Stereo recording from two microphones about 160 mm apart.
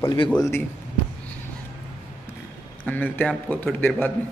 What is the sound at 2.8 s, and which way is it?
A man's voice, 10° left (ahead or behind).